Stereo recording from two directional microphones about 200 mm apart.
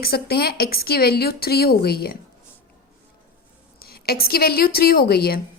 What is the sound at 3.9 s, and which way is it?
A woman's voice, 50° left (ahead or behind).